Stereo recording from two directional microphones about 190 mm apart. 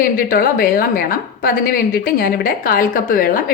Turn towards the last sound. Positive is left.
turn(degrees=45)  # may be behind; listen again after turning